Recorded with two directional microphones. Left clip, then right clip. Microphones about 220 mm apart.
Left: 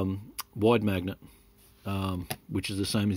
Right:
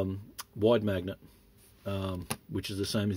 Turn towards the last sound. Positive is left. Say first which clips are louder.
# left 2 dB
turn(degrees=30)  # may be behind; listen again after turning